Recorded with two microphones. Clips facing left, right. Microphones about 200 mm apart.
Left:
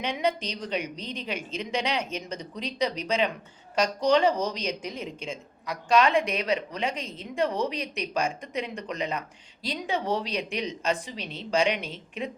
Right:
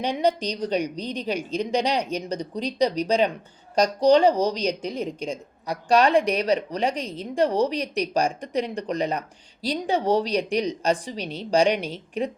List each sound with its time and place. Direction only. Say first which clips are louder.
0.0 s speech: right 5 dB; 35° right (ahead or behind)